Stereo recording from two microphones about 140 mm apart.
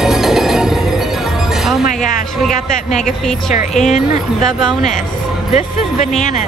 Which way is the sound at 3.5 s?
60° left (ahead or behind).